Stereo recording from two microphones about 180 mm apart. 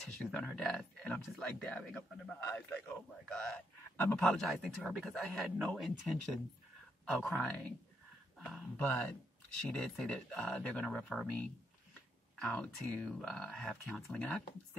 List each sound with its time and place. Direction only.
0.0 s speech: 5° left (ahead or behind)